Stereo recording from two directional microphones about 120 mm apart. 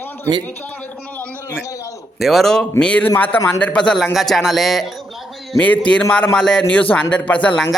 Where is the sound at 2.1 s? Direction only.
Centre (ahead or behind).